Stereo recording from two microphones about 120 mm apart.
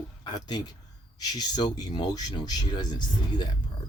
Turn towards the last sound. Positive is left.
turn(degrees=35)  # may be behind; listen again after turning